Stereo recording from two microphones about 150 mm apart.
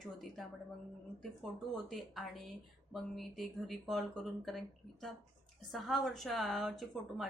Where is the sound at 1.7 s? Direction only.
Centre (ahead or behind).